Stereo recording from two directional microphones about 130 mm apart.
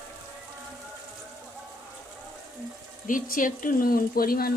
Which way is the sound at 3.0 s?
90° left.